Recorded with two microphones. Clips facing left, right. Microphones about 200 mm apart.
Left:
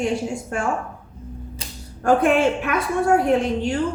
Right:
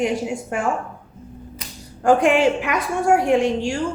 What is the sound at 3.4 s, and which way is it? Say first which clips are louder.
Speech: right 2 dB; 80° right.